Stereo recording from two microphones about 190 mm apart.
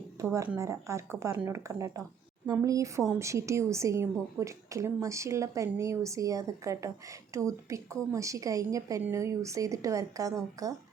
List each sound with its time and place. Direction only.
0.2 s a woman's voice: 15° right (ahead or behind)